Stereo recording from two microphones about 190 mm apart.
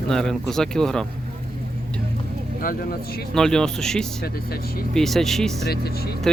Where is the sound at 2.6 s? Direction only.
50° left (ahead or behind).